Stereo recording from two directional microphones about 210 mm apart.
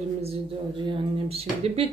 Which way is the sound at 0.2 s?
25° right (ahead or behind).